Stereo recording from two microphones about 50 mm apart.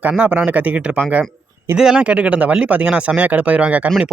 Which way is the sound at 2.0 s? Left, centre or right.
Right.